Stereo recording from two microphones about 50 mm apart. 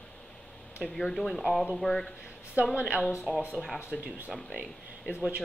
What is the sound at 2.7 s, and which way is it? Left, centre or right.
Speech, right.